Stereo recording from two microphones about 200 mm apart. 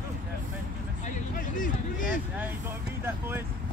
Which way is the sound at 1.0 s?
40° left (ahead or behind).